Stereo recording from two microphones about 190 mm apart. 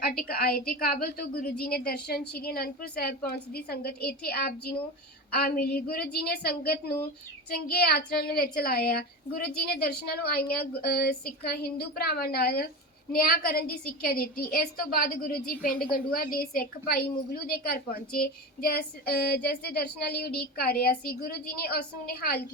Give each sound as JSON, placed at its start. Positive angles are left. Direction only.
{"t": 0.0, "sound": "a woman's voice", "side_deg": 50}
{"t": 0.7, "sound": "child singing", "side_deg": 50}
{"t": 7.7, "sound": "a woman's voice", "side_deg": 55}
{"t": 9.6, "sound": "child singing", "side_deg": 55}
{"t": 13.1, "sound": "a woman's voice", "side_deg": 50}
{"t": 18.2, "sound": "child singing", "side_deg": 55}